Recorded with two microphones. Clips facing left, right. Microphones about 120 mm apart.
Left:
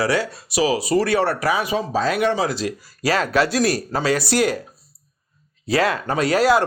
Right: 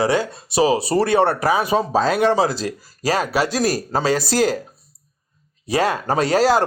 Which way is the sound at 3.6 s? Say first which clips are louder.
Even; 40° right (ahead or behind).